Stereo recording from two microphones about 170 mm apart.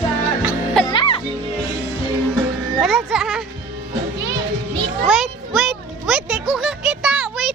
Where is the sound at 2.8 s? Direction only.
Centre (ahead or behind).